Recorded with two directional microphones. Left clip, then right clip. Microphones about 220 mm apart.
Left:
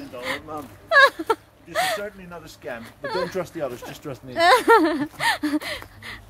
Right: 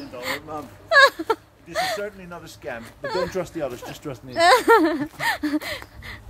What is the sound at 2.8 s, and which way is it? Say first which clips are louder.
Speech: right 1 dB; centre (ahead or behind).